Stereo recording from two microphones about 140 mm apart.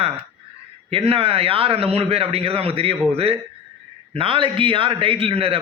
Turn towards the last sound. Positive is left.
turn(degrees=-45)  # may be behind; listen again after turning